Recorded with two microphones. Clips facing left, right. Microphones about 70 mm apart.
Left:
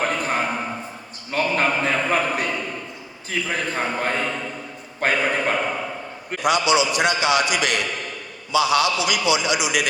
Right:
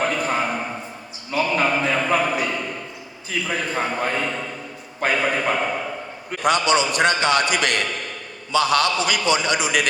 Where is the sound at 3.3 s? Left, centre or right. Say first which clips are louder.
Even; left.